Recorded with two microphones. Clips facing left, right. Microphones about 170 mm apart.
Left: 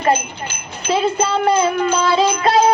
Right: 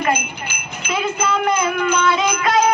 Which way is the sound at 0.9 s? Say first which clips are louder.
Left 4 dB; 30° left (ahead or behind).